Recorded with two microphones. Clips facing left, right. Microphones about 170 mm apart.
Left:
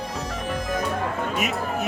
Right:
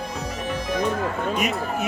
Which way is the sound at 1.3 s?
Centre (ahead or behind).